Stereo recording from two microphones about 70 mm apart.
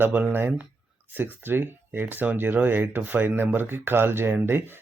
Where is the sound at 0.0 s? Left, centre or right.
Right.